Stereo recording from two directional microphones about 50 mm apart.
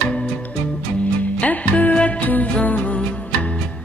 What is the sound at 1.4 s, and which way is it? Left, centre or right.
Music, left.